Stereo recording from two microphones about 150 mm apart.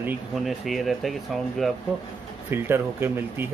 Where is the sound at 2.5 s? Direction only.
15° right (ahead or behind).